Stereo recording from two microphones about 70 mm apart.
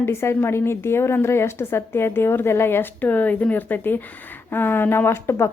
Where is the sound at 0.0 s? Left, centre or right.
Left.